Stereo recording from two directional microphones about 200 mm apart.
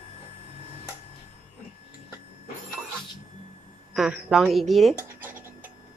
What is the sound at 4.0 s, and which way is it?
Scratch, 5° right (ahead or behind).